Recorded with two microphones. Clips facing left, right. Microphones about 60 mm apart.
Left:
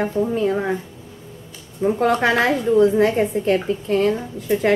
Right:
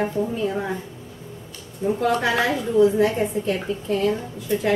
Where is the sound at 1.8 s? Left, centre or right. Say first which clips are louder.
Left 3 dB; left.